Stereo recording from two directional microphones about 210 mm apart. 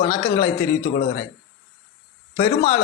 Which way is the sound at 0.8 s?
50° left (ahead or behind).